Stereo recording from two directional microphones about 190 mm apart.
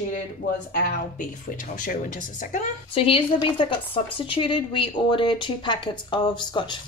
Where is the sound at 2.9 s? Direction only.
30° left (ahead or behind).